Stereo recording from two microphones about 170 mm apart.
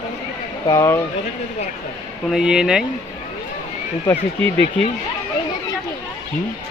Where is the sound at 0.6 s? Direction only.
20° left (ahead or behind).